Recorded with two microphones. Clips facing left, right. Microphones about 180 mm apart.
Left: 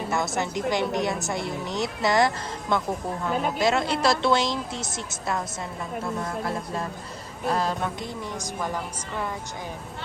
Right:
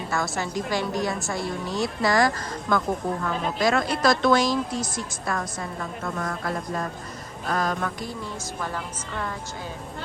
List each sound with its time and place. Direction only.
0.1 s a woman's voice: 20° left (ahead or behind)
7.4 s a woman's voice: 30° left (ahead or behind)
8.6 s a woman's voice: 10° left (ahead or behind)